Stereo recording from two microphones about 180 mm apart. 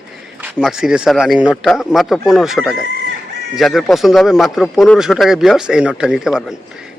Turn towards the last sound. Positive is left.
turn(degrees=-5)  # may be behind; listen again after turning